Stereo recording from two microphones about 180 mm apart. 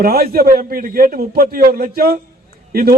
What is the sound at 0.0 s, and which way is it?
A man's voice, 60° right (ahead or behind).